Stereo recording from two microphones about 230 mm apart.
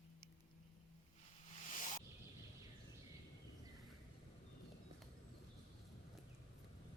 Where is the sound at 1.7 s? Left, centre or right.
Left.